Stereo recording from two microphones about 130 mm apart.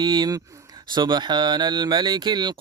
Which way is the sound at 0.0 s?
35° right (ahead or behind).